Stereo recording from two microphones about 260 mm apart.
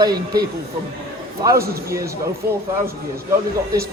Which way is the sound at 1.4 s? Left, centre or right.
Centre.